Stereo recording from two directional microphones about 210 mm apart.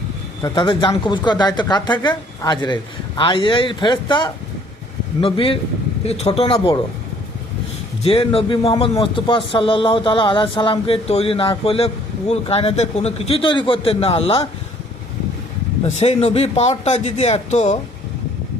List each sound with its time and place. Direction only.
0.4 s a man's voice: 20° left (ahead or behind)
8.0 s a man's voice: 25° left (ahead or behind)
15.8 s speech: 30° left (ahead or behind)